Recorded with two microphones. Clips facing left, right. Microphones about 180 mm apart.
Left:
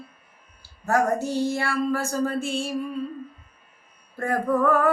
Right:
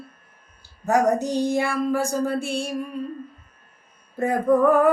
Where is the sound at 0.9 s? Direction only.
20° right (ahead or behind).